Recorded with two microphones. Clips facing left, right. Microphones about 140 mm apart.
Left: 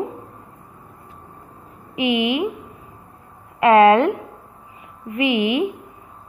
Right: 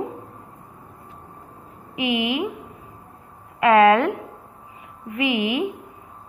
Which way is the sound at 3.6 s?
25° left (ahead or behind).